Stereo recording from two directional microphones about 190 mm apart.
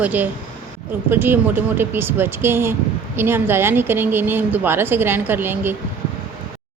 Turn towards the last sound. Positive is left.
turn(degrees=-10)  # may be behind; listen again after turning